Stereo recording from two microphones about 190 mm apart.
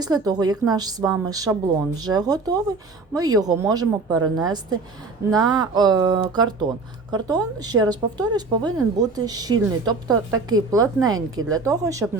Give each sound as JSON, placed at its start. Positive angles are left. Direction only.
{"t": 0.0, "sound": "a woman's voice", "side_deg": -20}